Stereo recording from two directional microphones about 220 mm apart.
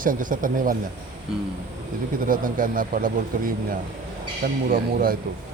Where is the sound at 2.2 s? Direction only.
40° right (ahead or behind).